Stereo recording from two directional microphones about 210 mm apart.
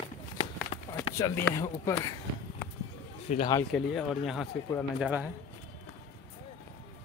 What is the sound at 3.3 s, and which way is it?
Speech, 25° left (ahead or behind).